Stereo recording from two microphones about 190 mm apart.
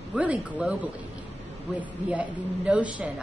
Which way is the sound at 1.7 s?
5° right (ahead or behind).